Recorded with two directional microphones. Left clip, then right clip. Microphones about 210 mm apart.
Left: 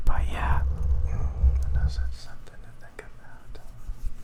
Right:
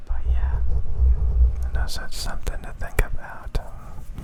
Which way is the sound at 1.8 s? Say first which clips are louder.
Right 11 dB; 30° right (ahead or behind).